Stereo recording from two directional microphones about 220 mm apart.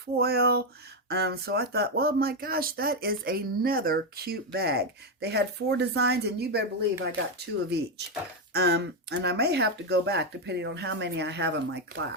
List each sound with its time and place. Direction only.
0.2 s speech: 45° right (ahead or behind)
8.5 s speech: 50° right (ahead or behind)